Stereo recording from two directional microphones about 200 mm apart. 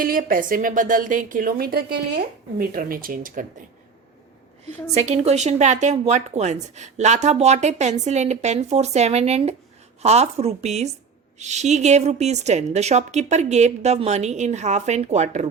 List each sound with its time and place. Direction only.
0.0 s a woman's voice: 45° right (ahead or behind)
4.6 s a woman's voice: 35° right (ahead or behind)